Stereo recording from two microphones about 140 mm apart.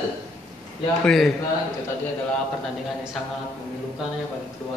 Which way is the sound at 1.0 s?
5° left (ahead or behind).